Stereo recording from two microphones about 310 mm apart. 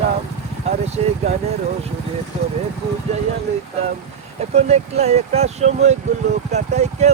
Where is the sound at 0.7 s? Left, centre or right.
Right.